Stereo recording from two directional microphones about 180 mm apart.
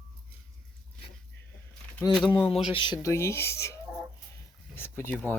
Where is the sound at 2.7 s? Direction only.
30° left (ahead or behind).